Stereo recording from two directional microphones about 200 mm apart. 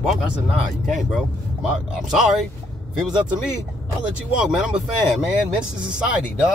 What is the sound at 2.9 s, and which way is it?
Speech, 5° right (ahead or behind).